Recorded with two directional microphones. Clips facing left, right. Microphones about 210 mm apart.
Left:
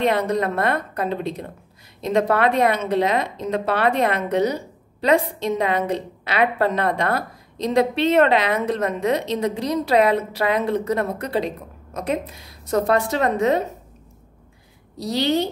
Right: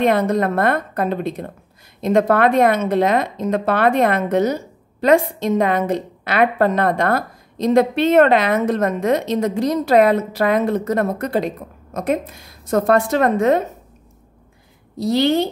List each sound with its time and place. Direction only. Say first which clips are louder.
0.0 s a woman's voice: right 4 dB; 50° right (ahead or behind)
15.0 s a woman's voice: right 4 dB; 50° right (ahead or behind)